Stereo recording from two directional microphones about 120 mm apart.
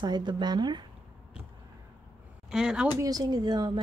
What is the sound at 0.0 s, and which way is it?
Speech, 40° right (ahead or behind).